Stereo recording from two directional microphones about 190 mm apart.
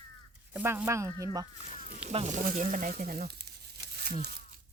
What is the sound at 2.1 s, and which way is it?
Speech, 35° right (ahead or behind).